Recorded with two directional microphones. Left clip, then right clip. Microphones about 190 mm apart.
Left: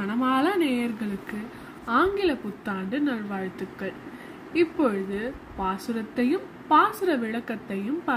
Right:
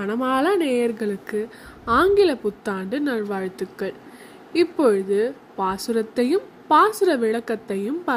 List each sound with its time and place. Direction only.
0.0 s a woman's voice: 45° right (ahead or behind)